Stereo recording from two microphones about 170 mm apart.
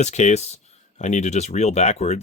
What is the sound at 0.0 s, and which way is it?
Speech, 40° left (ahead or behind).